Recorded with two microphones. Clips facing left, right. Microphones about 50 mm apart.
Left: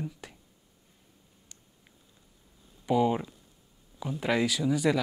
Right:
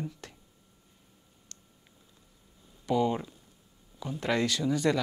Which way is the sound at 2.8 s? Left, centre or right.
Centre.